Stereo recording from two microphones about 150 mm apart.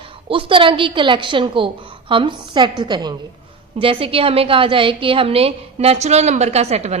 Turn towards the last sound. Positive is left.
turn(degrees=-45)  # may be behind; listen again after turning